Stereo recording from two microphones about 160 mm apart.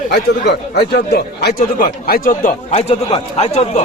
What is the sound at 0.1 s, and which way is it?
A man's voice, 90° left.